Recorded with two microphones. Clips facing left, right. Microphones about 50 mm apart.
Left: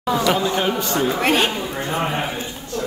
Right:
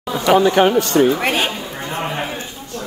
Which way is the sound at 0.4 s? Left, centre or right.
Right.